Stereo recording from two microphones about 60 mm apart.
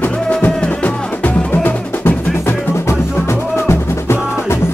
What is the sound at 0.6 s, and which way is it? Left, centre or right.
Music, left.